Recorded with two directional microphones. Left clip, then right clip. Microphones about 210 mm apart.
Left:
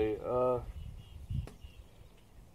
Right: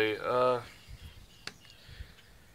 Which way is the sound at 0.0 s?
45° right (ahead or behind).